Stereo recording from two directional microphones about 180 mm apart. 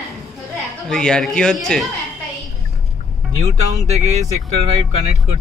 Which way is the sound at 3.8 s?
35° right (ahead or behind).